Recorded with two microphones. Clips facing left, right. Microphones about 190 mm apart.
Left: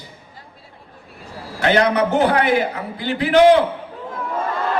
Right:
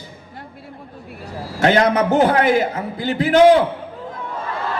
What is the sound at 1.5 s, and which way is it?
A man's voice, 45° right (ahead or behind).